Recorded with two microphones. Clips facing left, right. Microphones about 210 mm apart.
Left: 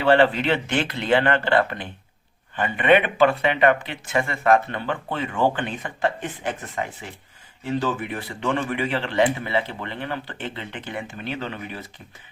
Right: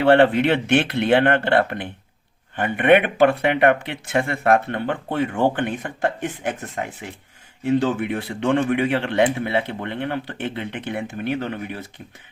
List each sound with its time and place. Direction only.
0.0 s speech: 60° right (ahead or behind)